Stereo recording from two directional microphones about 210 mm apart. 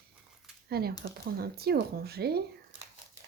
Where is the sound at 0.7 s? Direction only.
45° right (ahead or behind).